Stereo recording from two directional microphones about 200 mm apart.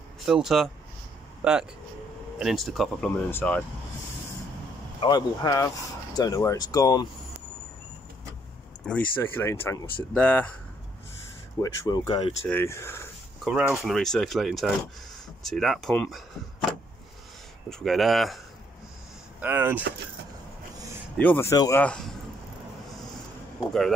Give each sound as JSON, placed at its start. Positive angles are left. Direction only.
{"t": 0.2, "sound": "speech", "side_deg": 0}
{"t": 5.0, "sound": "speech", "side_deg": 20}
{"t": 8.8, "sound": "speech", "side_deg": 10}
{"t": 11.6, "sound": "speech", "side_deg": 15}
{"t": 12.4, "sound": "speech", "side_deg": 10}
{"t": 13.4, "sound": "speech", "side_deg": -5}
{"t": 17.6, "sound": "speech", "side_deg": 0}
{"t": 19.4, "sound": "speech", "side_deg": -10}
{"t": 21.2, "sound": "speech", "side_deg": 10}